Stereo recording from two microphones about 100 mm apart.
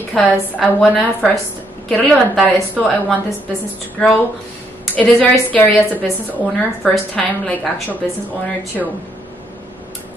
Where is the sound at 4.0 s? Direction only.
10° left (ahead or behind).